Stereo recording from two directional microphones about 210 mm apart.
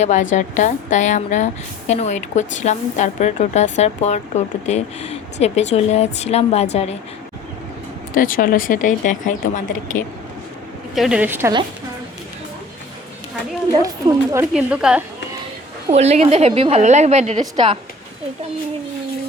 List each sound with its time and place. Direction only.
0.0 s a woman's voice: 35° left (ahead or behind)
8.1 s a woman's voice: 40° left (ahead or behind)
10.9 s a woman's voice: centre (ahead or behind)
13.8 s a woman's voice: 15° right (ahead or behind)
14.5 s a woman's voice: 5° right (ahead or behind)
15.9 s a woman's voice: 30° right (ahead or behind)